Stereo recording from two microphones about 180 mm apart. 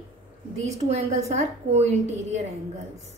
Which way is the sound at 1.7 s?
35° right (ahead or behind).